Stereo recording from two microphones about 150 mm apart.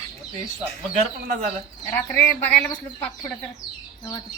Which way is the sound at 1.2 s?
55° right (ahead or behind).